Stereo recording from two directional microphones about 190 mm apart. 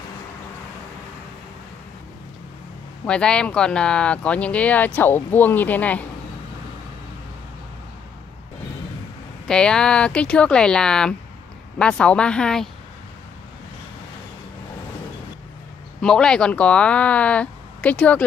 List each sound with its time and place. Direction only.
3.1 s speech: 5° left (ahead or behind)
9.5 s speech: 5° left (ahead or behind)
16.0 s speech: 5° left (ahead or behind)